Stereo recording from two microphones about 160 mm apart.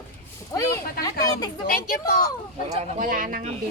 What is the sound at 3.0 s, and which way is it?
Speech, 60° right (ahead or behind).